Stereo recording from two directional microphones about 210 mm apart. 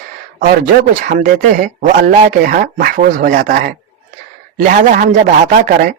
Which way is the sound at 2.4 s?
40° right (ahead or behind).